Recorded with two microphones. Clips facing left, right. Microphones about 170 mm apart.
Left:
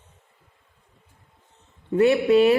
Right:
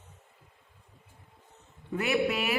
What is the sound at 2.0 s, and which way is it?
Speech, 30° left (ahead or behind).